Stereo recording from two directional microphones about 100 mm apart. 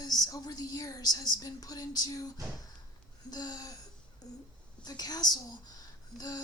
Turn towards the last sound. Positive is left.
turn(degrees=40)  # may be behind; listen again after turning